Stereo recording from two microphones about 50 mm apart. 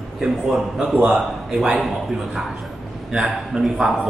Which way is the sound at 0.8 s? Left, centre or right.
Right.